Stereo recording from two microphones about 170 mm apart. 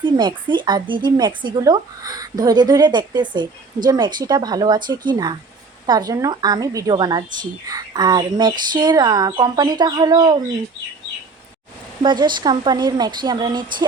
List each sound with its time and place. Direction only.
0.0 s speech: 25° right (ahead or behind)
12.0 s speech: 25° right (ahead or behind)